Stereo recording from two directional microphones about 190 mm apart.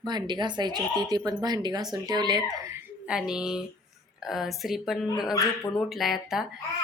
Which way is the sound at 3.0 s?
5° right (ahead or behind).